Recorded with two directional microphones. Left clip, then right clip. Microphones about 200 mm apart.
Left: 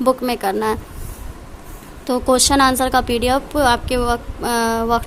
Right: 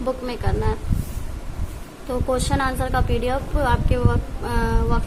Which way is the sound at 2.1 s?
50° left (ahead or behind).